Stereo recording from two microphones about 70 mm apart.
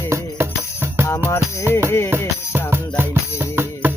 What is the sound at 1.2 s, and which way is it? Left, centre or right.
Music, left.